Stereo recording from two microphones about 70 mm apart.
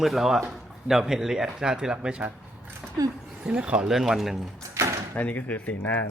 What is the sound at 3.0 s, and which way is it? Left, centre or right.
Speech, right.